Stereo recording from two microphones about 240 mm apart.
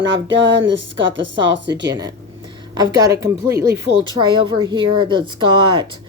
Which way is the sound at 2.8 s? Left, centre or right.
Centre.